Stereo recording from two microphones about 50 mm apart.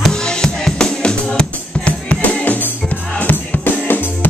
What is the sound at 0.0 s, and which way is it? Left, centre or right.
Music, centre.